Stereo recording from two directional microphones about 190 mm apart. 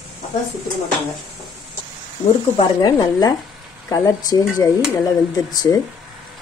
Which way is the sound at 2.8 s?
20° left (ahead or behind).